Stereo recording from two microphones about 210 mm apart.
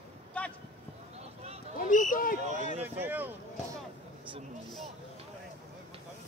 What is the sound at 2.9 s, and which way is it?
Speech, 10° right (ahead or behind).